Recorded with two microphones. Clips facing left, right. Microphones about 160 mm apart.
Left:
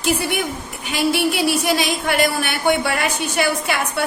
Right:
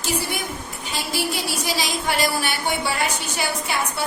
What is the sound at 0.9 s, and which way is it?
Speech, 65° left (ahead or behind).